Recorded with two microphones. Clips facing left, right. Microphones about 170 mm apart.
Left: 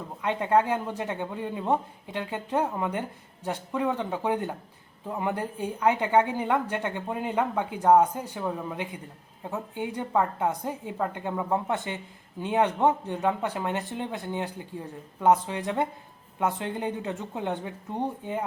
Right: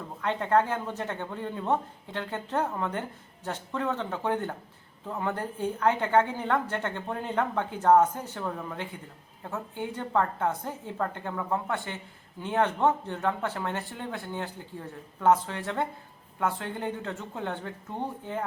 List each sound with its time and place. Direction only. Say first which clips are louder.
0.2 s a woman's voice: left 1 dB; 15° left (ahead or behind)